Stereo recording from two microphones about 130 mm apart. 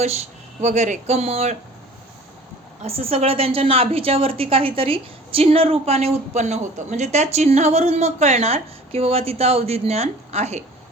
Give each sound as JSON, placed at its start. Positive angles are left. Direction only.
{"t": 0.6, "sound": "speech", "side_deg": -65}
{"t": 2.8, "sound": "a woman's voice", "side_deg": -50}